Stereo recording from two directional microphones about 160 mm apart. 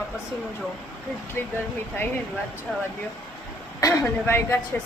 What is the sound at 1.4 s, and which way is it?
Speech, 15° left (ahead or behind).